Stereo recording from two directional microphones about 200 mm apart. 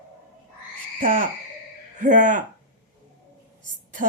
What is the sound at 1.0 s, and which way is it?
A woman's voice, 45° right (ahead or behind).